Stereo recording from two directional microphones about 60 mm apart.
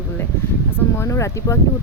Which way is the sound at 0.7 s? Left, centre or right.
Left.